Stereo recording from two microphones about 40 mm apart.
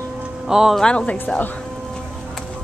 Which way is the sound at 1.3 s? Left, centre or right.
Left.